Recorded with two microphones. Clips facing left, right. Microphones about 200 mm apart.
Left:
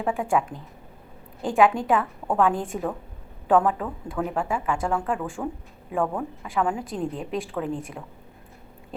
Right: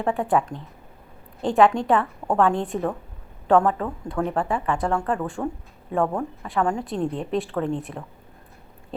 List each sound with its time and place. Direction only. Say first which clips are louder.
0.0 s a woman's voice: right 2 dB; centre (ahead or behind)